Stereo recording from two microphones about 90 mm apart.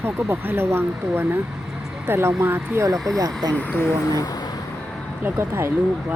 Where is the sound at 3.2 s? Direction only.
45° right (ahead or behind).